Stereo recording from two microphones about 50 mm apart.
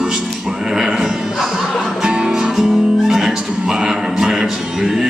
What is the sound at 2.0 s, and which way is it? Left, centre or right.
Music, centre.